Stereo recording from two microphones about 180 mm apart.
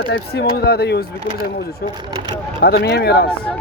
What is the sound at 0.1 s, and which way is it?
Speech, 65° left (ahead or behind).